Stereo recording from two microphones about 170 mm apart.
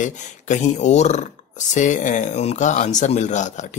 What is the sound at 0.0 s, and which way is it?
Speech, 45° left (ahead or behind).